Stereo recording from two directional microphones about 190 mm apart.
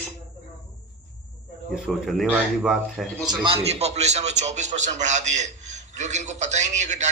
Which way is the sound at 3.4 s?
30° right (ahead or behind).